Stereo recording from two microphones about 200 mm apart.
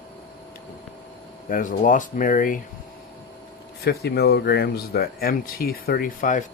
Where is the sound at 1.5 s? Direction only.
40° left (ahead or behind).